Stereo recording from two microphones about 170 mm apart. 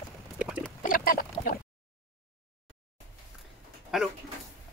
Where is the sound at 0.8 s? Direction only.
55° left (ahead or behind).